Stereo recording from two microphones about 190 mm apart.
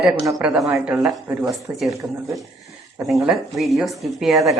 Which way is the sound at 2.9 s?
Centre (ahead or behind).